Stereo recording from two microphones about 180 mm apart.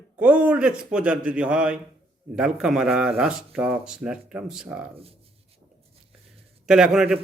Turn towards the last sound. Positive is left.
turn(degrees=-5)  # may be behind; listen again after turning